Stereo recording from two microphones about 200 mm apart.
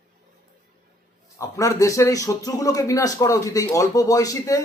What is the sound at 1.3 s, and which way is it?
A man's voice, 15° left (ahead or behind).